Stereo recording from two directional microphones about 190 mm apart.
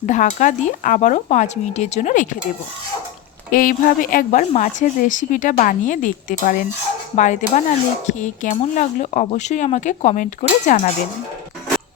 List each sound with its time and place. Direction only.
0.0 s speech: 40° left (ahead or behind)
3.5 s a woman's voice: 45° left (ahead or behind)